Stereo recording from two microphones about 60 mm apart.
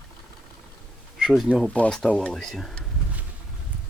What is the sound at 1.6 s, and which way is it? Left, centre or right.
Speech, left.